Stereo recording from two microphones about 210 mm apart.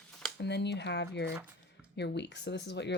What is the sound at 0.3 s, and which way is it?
A woman's voice, 55° left (ahead or behind).